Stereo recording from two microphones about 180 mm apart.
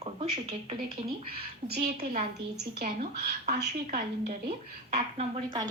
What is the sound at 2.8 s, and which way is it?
Speech, 55° right (ahead or behind).